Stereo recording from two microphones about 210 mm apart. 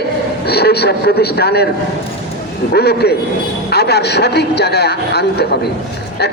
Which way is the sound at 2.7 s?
50° left (ahead or behind).